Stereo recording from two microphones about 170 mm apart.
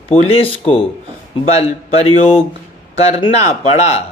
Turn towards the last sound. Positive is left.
turn(degrees=40)  # may be behind; listen again after turning